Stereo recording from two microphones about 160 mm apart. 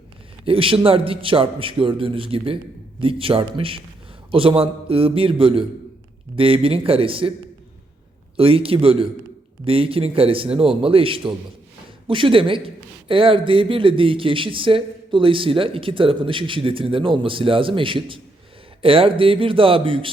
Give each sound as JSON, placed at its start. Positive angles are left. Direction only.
{"t": 0.4, "sound": "a man's voice", "side_deg": -35}
{"t": 8.4, "sound": "a man's voice", "side_deg": -35}